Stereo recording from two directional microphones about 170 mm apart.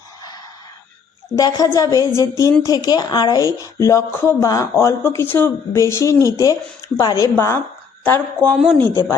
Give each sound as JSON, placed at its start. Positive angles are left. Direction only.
{"t": 1.4, "sound": "speech", "side_deg": 20}
{"t": 6.1, "sound": "speech", "side_deg": -20}
{"t": 6.9, "sound": "speech", "side_deg": 20}
{"t": 8.5, "sound": "speech", "side_deg": 0}